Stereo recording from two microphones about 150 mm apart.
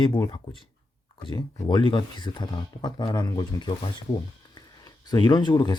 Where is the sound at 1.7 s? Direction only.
35° left (ahead or behind).